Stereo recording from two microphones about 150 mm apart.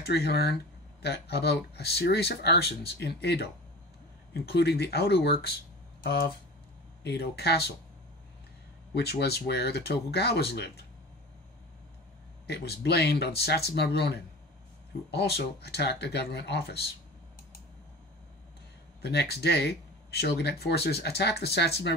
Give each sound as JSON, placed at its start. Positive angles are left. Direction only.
{"t": 0.0, "sound": "speech", "side_deg": 90}
{"t": 8.9, "sound": "speech", "side_deg": 90}
{"t": 12.4, "sound": "speech", "side_deg": 90}
{"t": 18.9, "sound": "speech", "side_deg": 90}